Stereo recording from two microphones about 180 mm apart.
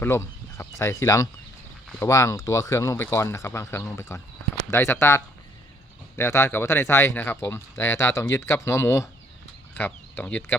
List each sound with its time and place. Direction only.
0.0 s speech: 15° left (ahead or behind)